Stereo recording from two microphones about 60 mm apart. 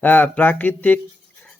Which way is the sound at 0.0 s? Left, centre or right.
Left.